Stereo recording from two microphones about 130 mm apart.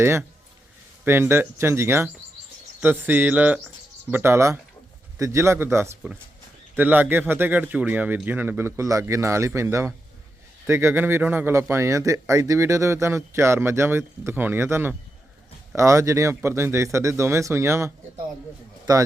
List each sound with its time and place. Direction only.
1.0 s speech: 15° right (ahead or behind)